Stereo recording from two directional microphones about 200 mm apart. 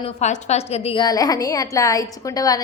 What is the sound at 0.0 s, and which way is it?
A woman's voice, 35° left (ahead or behind).